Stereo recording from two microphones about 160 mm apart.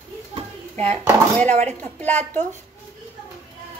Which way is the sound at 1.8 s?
10° left (ahead or behind).